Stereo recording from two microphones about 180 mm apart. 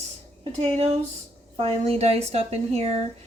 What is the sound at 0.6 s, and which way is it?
Speech, 35° right (ahead or behind).